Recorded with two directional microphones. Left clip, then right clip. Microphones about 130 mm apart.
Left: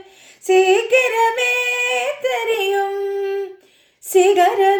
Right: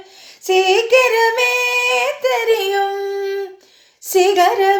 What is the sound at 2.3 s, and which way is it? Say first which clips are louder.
Singing: right 2 dB; 20° left (ahead or behind).